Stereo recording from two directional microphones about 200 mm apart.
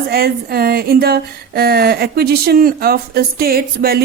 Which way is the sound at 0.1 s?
50° right (ahead or behind).